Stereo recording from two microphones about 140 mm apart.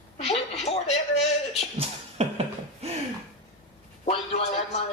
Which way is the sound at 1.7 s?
45° right (ahead or behind).